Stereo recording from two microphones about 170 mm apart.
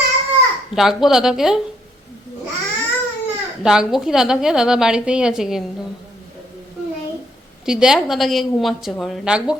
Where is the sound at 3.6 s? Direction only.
5° right (ahead or behind).